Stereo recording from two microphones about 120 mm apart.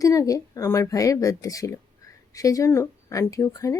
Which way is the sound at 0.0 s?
30° left (ahead or behind).